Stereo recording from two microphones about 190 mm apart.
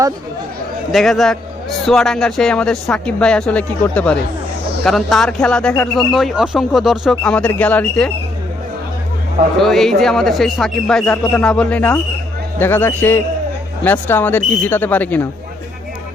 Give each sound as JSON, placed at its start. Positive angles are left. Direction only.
{"t": 0.9, "sound": "speech", "side_deg": 0}
{"t": 9.6, "sound": "speech", "side_deg": 0}